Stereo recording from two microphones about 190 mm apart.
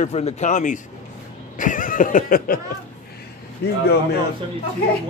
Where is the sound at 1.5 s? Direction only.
45° left (ahead or behind).